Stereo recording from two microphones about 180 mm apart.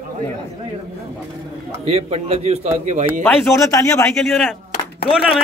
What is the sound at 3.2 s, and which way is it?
Speech, 10° left (ahead or behind).